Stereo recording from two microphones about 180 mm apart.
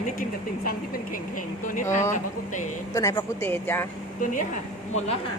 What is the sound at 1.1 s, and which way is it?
Speech, 50° left (ahead or behind).